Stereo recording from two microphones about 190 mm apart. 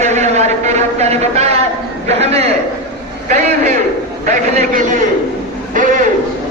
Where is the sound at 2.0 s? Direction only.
35° right (ahead or behind).